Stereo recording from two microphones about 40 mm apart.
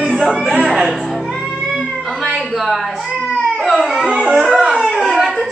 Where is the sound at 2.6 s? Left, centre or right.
Centre.